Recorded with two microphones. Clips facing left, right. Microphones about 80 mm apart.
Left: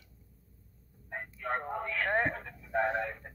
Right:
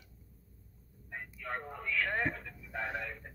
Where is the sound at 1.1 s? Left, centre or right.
Left.